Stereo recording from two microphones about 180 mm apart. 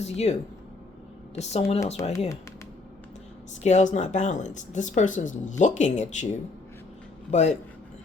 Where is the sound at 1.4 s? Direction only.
35° left (ahead or behind).